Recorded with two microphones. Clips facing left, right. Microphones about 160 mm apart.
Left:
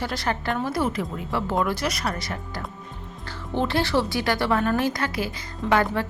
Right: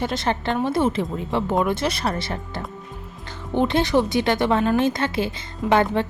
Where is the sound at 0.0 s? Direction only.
20° right (ahead or behind).